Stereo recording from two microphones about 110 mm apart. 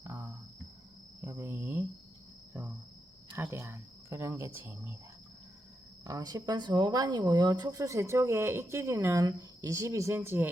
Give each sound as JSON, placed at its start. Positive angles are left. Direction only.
{"t": 0.0, "sound": "cricket", "side_deg": -25}
{"t": 3.3, "sound": "cricket", "side_deg": -25}
{"t": 6.1, "sound": "speech", "side_deg": -35}